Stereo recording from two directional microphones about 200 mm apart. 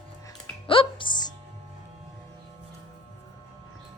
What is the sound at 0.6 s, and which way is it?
Music, 25° left (ahead or behind).